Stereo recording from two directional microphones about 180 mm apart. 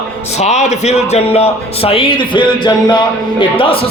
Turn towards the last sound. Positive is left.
turn(degrees=30)  # may be behind; listen again after turning